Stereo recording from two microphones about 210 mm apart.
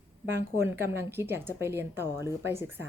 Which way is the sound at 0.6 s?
10° right (ahead or behind).